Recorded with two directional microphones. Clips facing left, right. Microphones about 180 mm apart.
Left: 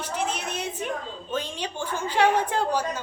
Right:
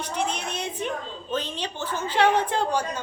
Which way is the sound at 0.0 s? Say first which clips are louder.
Right 1 dB; 5° left (ahead or behind).